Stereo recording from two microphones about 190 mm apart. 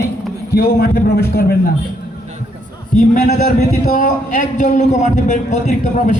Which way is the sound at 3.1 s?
50° left (ahead or behind).